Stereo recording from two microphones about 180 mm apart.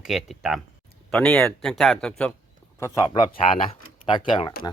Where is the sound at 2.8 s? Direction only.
15° left (ahead or behind).